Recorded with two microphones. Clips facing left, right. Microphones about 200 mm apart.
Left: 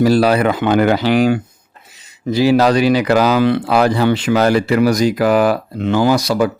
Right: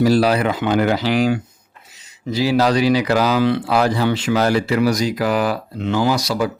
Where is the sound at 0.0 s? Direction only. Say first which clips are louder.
Left 3 dB; 60° left (ahead or behind).